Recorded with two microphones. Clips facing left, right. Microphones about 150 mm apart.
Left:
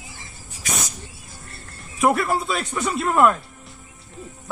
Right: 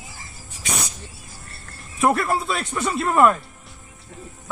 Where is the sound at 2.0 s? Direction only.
Centre (ahead or behind).